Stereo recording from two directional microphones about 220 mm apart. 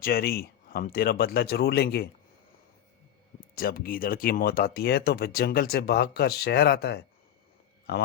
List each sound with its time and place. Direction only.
0.0 s speech: 45° left (ahead or behind)
3.5 s speech: 40° left (ahead or behind)